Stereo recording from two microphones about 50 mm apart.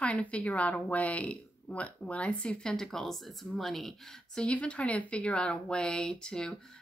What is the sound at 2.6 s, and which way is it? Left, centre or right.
Speech, centre.